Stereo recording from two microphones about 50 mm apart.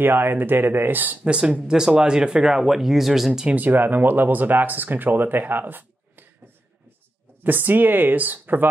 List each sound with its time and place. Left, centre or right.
0.0 s speech: right
1.2 s speech: right
3.4 s speech: right